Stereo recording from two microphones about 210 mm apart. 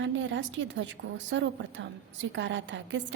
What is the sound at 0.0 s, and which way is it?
A woman's voice, 60° right (ahead or behind).